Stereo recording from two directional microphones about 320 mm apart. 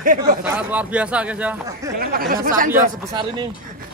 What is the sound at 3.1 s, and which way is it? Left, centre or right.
Speech, centre.